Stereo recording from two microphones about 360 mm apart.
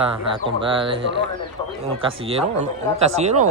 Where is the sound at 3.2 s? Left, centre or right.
Centre.